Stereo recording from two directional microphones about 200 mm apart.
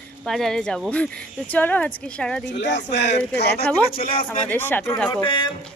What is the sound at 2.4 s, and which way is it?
Speech, 60° left (ahead or behind).